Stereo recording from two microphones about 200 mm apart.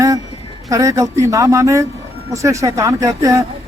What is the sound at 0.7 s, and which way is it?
Speech, 15° right (ahead or behind).